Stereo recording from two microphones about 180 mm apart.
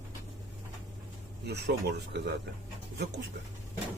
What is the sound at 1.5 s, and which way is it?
Speech, 65° right (ahead or behind).